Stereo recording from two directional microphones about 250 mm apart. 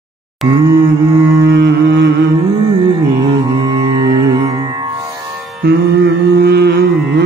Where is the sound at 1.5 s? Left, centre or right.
Right.